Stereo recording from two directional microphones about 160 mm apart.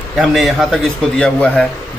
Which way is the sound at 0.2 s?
Centre (ahead or behind).